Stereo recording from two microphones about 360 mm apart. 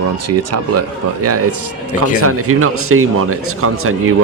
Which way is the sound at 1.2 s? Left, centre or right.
Right.